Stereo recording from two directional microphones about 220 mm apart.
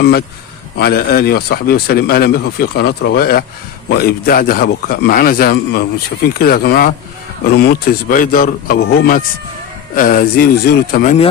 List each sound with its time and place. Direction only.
0.7 s a man's voice: 45° left (ahead or behind)